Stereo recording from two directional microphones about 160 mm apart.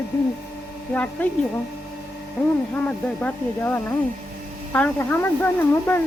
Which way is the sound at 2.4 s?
5° left (ahead or behind).